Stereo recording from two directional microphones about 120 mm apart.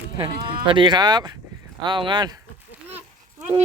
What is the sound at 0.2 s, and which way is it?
Speech, 45° right (ahead or behind).